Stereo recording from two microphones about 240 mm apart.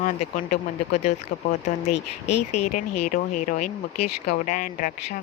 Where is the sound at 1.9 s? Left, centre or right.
Left.